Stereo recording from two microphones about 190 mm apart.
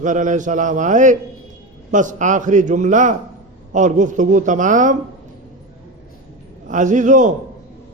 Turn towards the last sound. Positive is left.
turn(degrees=-40)  # may be behind; listen again after turning